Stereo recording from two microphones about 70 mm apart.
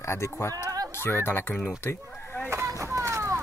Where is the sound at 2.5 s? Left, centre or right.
Right.